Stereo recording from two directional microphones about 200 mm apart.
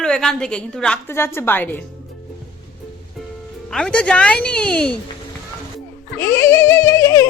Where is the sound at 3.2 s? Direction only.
Centre (ahead or behind).